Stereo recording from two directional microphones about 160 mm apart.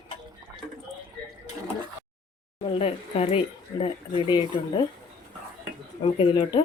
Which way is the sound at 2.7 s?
35° left (ahead or behind).